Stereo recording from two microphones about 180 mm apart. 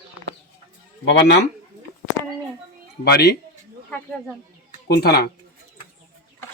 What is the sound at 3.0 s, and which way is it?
Speech, 65° left (ahead or behind).